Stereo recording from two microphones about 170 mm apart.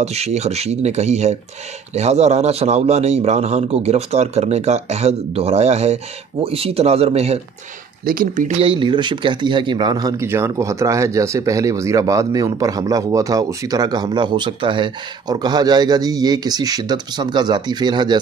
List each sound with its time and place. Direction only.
0.0 s speech: 40° right (ahead or behind)
8.0 s speech: 55° right (ahead or behind)
8.5 s speech: 30° right (ahead or behind)